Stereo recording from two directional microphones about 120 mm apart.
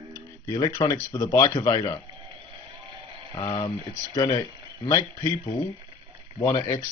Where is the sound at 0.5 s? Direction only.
30° left (ahead or behind).